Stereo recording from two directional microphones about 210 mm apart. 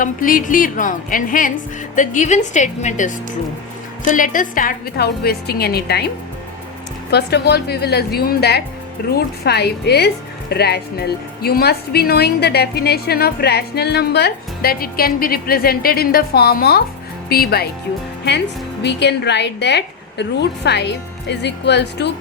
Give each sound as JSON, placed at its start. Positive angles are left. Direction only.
{"t": 0.0, "sound": "a woman's voice", "side_deg": 40}
{"t": 7.1, "sound": "a woman's voice", "side_deg": 50}